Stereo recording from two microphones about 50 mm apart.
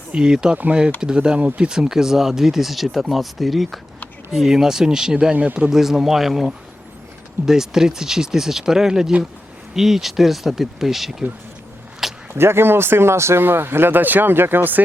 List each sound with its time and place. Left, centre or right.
0.1 s speech: centre
5.3 s speech: right
5.7 s speech: centre
12.3 s speech: right
13.4 s speech: right